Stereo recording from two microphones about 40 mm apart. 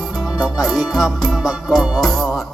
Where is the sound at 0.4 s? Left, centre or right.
Centre.